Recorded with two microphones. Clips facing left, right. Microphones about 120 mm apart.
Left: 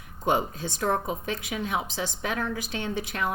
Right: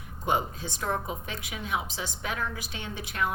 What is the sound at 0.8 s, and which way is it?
A woman's voice, 45° left (ahead or behind).